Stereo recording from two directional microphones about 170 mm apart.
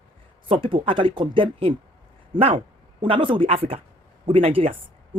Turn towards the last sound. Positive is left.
turn(degrees=-35)  # may be behind; listen again after turning